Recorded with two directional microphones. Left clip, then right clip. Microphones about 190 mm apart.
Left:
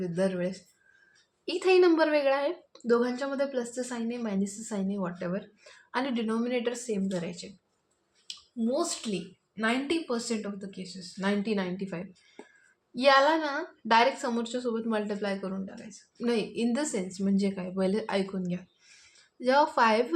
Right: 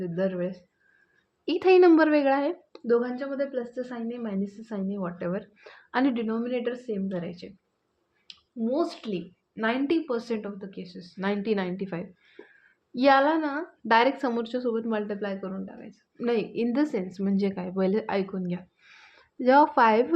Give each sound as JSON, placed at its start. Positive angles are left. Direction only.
{"t": 0.0, "sound": "a woman's voice", "side_deg": -15}
{"t": 1.5, "sound": "a woman's voice", "side_deg": -25}
{"t": 2.8, "sound": "a woman's voice", "side_deg": -10}
{"t": 6.2, "sound": "a woman's voice", "side_deg": -10}
{"t": 16.2, "sound": "a woman's voice", "side_deg": -25}